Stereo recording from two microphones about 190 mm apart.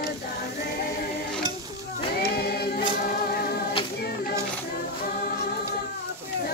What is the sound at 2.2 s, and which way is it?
Music, 55° left (ahead or behind).